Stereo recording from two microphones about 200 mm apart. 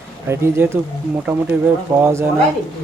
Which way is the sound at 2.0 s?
15° right (ahead or behind).